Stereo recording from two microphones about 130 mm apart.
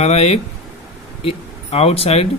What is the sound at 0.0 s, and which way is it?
Speech, 55° left (ahead or behind).